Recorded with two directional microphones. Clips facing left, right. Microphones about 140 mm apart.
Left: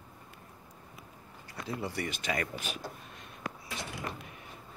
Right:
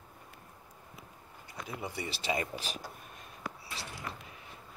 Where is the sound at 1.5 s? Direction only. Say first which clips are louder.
Left 3 dB; 15° right (ahead or behind).